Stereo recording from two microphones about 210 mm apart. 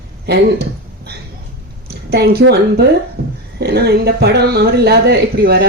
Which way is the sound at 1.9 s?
50° right (ahead or behind).